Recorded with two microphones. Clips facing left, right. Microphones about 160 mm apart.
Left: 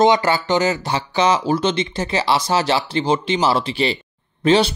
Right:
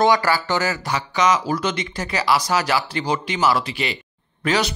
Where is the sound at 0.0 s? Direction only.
20° left (ahead or behind).